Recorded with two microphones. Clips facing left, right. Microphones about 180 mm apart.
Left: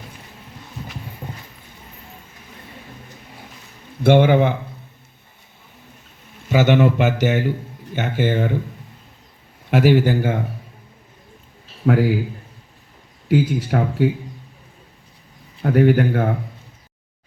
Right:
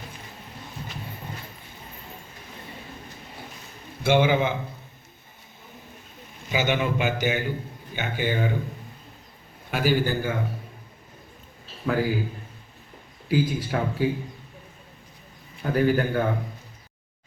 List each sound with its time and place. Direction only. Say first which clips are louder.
4.0 s a man's voice: left 6 dB; 60° left (ahead or behind)
6.5 s a man's voice: left 9 dB; 75° left (ahead or behind)
9.6 s a man's voice: left 8 dB; 80° left
11.9 s a man's voice: left 7 dB; 70° left (ahead or behind)
13.2 s a man's voice: left 5 dB; 70° left (ahead or behind)
15.6 s a man's voice: left 6 dB; 70° left (ahead or behind)